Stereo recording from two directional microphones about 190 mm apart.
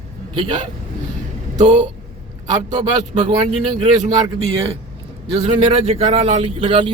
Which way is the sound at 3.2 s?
25° right (ahead or behind).